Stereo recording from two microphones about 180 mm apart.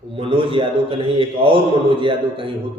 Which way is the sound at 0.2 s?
30° right (ahead or behind).